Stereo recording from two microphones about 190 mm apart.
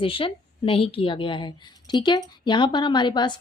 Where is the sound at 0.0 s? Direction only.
30° left (ahead or behind).